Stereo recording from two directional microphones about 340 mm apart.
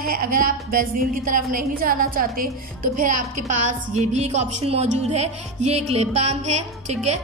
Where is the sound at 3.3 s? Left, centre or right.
Right.